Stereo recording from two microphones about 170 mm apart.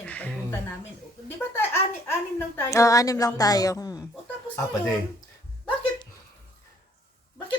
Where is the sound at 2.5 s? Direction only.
20° left (ahead or behind).